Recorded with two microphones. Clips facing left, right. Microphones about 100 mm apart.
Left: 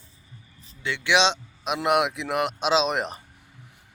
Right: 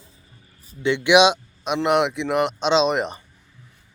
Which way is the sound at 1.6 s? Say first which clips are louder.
Right 3 dB; centre (ahead or behind).